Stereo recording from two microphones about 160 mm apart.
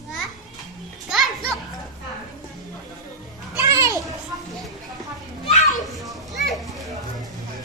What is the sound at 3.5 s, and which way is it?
Children playing, 15° right (ahead or behind).